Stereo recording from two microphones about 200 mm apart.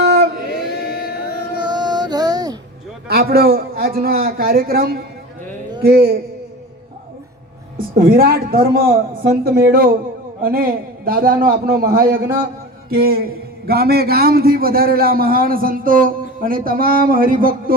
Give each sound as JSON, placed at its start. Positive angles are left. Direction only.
{"t": 0.0, "sound": "singing", "side_deg": -55}
{"t": 0.9, "sound": "music", "side_deg": 50}
{"t": 1.6, "sound": "music", "side_deg": -20}
{"t": 3.1, "sound": "a man's voice", "side_deg": -50}
{"t": 8.0, "sound": "a man's voice", "side_deg": -45}